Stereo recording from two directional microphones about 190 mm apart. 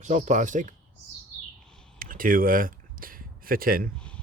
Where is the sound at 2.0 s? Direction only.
45° right (ahead or behind).